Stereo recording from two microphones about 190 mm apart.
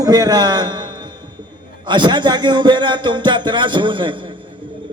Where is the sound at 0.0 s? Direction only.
20° right (ahead or behind).